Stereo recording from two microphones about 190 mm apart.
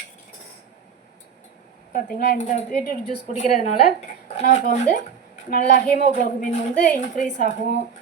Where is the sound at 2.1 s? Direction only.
40° left (ahead or behind).